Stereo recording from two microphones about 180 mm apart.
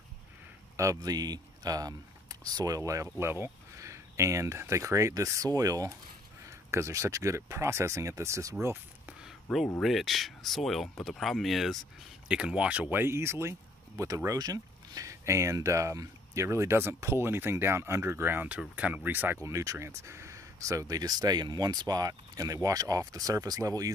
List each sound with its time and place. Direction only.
0.7 s speech: 20° right (ahead or behind)
8.6 s a sound: 10° right (ahead or behind)
9.8 s speech: centre (ahead or behind); by 23.9 s 20° right (ahead or behind)